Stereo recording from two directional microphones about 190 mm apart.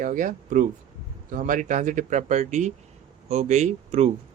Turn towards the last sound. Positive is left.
turn(degrees=-35)  # may be behind; listen again after turning